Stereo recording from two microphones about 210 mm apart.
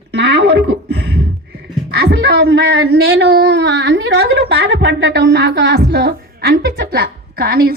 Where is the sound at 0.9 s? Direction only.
55° right (ahead or behind).